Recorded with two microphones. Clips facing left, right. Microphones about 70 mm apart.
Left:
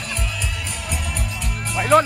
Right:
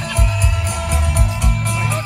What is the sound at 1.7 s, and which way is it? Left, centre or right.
Music, left.